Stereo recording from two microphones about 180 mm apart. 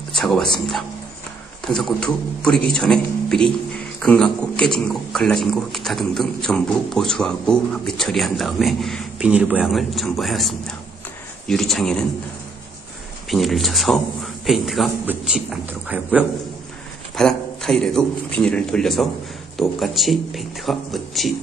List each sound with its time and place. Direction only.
0.1 s speech: centre (ahead or behind)
13.3 s speech: centre (ahead or behind)